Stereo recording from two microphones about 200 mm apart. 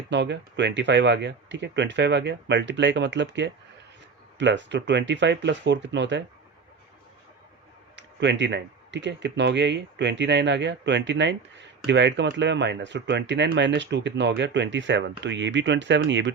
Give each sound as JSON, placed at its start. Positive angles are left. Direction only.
{"t": 0.1, "sound": "speech", "side_deg": -60}
{"t": 7.9, "sound": "speech", "side_deg": -60}